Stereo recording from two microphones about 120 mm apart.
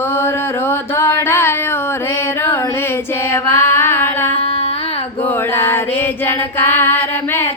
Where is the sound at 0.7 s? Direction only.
20° left (ahead or behind).